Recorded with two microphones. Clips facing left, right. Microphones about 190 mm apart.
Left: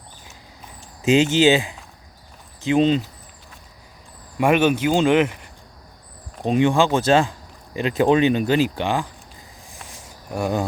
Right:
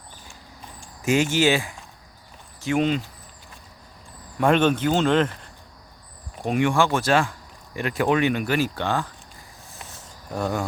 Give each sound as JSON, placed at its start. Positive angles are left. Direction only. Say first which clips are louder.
{"t": 1.0, "sound": "speech", "louder": "left 4 dB", "side_deg": 20}
{"t": 4.4, "sound": "speech", "louder": "left 2 dB", "side_deg": 10}
{"t": 9.9, "sound": "cricket", "louder": "left 2 dB", "side_deg": 10}